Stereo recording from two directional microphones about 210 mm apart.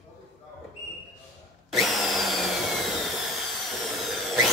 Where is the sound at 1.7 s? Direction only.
Centre (ahead or behind).